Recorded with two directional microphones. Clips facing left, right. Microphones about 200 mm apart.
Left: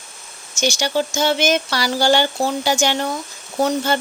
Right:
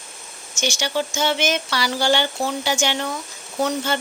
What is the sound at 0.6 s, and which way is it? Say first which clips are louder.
Speech: left 4 dB; 40° left (ahead or behind).